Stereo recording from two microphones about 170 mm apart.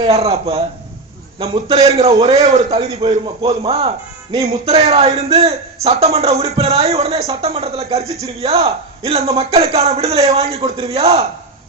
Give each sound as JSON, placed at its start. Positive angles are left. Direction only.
{"t": 0.0, "sound": "a man's voice", "side_deg": -35}
{"t": 1.7, "sound": "a man's voice", "side_deg": -40}